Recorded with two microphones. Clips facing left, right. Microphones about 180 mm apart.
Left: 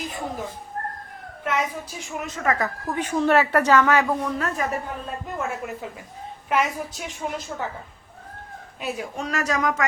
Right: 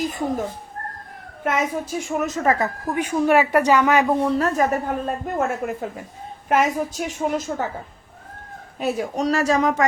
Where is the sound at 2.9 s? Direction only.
10° right (ahead or behind); by 7.5 s 45° right (ahead or behind).